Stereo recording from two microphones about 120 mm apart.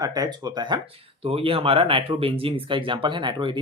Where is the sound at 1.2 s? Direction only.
50° right (ahead or behind).